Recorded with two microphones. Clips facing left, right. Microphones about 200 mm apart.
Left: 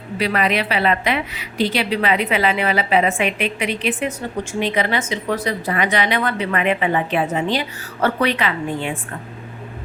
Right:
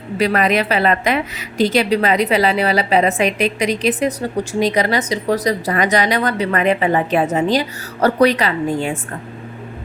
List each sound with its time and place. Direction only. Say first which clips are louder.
0.2 s speech: right 4 dB; 45° right (ahead or behind)